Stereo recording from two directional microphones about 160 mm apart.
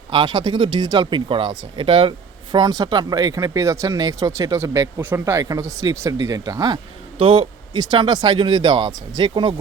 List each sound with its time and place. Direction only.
0.1 s speech: 30° right (ahead or behind)